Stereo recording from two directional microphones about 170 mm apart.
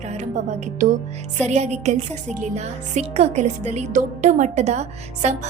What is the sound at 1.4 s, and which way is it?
Speech, 40° right (ahead or behind).